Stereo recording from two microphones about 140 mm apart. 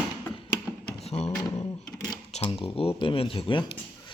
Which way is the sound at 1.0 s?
50° left (ahead or behind).